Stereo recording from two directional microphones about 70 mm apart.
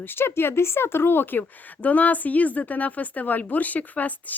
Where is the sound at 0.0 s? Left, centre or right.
Left.